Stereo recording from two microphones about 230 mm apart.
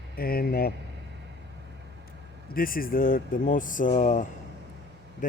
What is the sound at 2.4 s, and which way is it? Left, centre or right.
Speech, left.